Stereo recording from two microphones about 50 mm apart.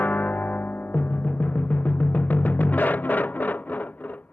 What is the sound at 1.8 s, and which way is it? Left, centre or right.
Timpani, left.